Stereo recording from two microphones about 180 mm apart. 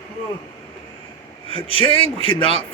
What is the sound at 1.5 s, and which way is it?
Speech, 30° left (ahead or behind).